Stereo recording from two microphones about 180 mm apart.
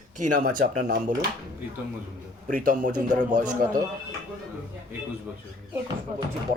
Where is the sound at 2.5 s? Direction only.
45° right (ahead or behind).